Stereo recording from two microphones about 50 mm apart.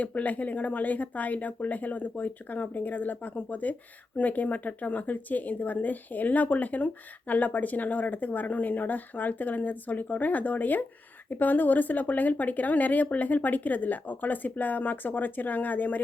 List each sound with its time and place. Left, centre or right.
0.0 s speech: left